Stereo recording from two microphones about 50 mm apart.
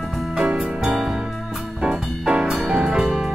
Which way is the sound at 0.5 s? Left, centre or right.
Centre.